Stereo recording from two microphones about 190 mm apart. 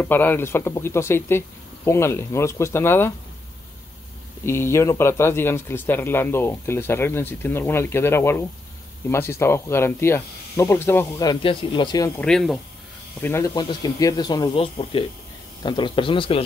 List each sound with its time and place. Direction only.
0.0 s speech: 10° left (ahead or behind)
4.5 s speech: 15° left (ahead or behind)
12.2 s speech: 5° left (ahead or behind)
13.2 s speech: 15° left (ahead or behind)